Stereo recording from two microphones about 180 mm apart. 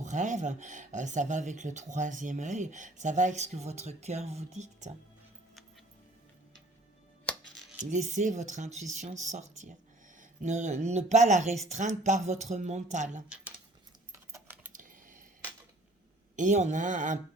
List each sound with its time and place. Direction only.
0.0 s speech: 40° right (ahead or behind)
7.8 s speech: 40° right (ahead or behind)
13.2 s speech: 5° right (ahead or behind)
14.4 s coin: 10° right (ahead or behind)
14.7 s a sound: 45° right (ahead or behind)
16.3 s speech: 45° right (ahead or behind)